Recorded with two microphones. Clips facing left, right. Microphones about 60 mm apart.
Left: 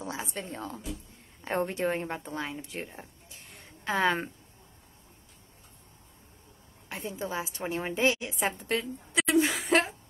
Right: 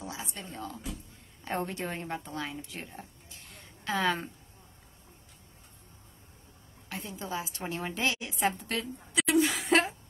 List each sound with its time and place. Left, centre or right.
0.0 s a woman's voice: left
6.9 s a woman's voice: left
9.7 s a sound: centre